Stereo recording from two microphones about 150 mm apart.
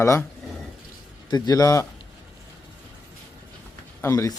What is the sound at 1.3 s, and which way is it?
Speech, 25° left (ahead or behind).